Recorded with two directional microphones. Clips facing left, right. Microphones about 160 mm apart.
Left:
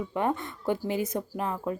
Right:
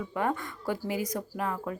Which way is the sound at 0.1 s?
20° left (ahead or behind).